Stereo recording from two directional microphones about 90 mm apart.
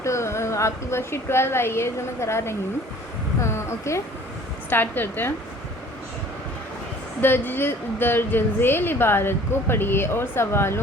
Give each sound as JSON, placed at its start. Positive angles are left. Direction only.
{"t": 0.0, "sound": "a woman's voice", "side_deg": 30}
{"t": 3.4, "sound": "a sound", "side_deg": 30}
{"t": 4.7, "sound": "a woman's voice", "side_deg": 20}
{"t": 7.2, "sound": "a woman's voice", "side_deg": 25}